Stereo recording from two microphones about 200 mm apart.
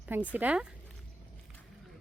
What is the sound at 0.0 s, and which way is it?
Speech, 10° right (ahead or behind).